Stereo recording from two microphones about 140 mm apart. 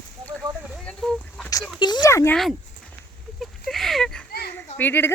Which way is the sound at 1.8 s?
30° left (ahead or behind).